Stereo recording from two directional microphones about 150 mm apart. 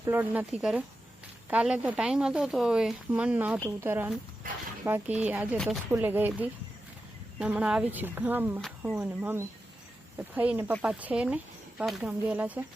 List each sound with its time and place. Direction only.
0.0 s a woman's voice: 15° right (ahead or behind)
5.9 s a woman's voice: 15° right (ahead or behind)